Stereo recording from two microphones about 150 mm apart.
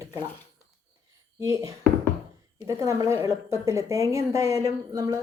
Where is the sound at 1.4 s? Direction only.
20° right (ahead or behind).